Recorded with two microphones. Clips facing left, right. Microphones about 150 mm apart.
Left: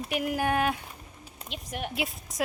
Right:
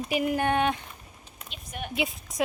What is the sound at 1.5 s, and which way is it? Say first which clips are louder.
Speech: left 3 dB; 85° left.